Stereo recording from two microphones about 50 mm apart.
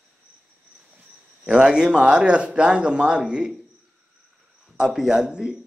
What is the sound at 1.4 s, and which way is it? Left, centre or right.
Speech, centre.